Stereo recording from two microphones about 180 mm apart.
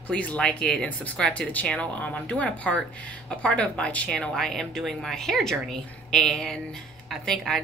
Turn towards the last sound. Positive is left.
turn(degrees=5)  # may be behind; listen again after turning